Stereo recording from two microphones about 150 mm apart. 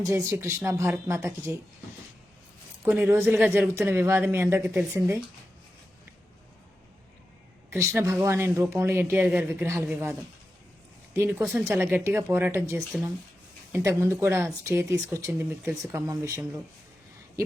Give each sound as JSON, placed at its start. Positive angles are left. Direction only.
{"t": 0.0, "sound": "speech", "side_deg": -20}
{"t": 2.8, "sound": "speech", "side_deg": -5}
{"t": 7.7, "sound": "speech", "side_deg": -15}